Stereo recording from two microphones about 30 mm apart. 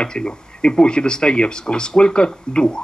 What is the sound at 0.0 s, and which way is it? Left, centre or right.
Speech, left.